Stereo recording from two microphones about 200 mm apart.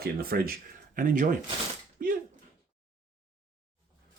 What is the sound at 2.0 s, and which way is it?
Slap, 45° right (ahead or behind).